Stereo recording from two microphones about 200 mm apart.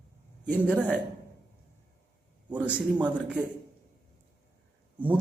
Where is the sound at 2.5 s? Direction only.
5° right (ahead or behind).